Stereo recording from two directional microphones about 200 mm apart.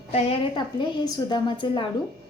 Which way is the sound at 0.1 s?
30° left (ahead or behind).